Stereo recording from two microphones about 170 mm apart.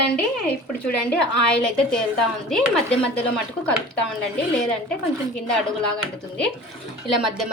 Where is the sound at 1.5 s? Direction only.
5° left (ahead or behind).